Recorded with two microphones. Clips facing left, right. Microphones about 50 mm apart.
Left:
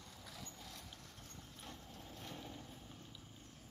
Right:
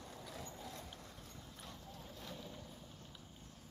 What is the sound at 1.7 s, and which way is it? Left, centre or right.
Boat, left.